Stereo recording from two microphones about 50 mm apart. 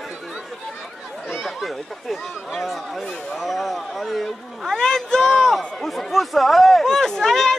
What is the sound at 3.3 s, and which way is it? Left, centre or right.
Speech, centre.